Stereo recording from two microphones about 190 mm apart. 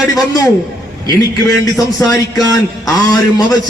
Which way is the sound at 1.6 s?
20° left (ahead or behind).